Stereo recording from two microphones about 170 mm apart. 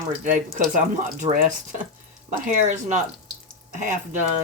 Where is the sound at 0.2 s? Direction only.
45° right (ahead or behind).